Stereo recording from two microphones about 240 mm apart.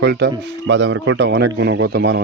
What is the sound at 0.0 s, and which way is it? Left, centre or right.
A man's voice, right.